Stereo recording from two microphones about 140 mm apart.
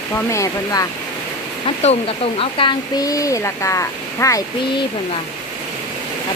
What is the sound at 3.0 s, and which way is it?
Speech, 25° left (ahead or behind).